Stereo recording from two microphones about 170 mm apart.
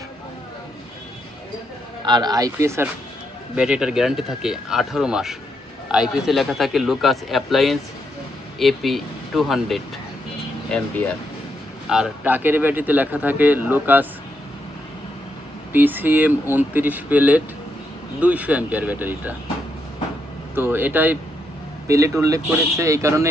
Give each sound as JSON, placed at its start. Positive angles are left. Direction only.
{"t": 2.0, "sound": "speech", "side_deg": -25}
{"t": 10.7, "sound": "speech", "side_deg": 10}
{"t": 11.9, "sound": "speech", "side_deg": -5}
{"t": 15.7, "sound": "speech", "side_deg": -10}
{"t": 20.6, "sound": "speech", "side_deg": -10}